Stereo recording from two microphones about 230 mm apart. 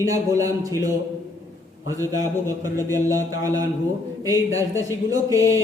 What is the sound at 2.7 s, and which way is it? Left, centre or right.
Speech, centre.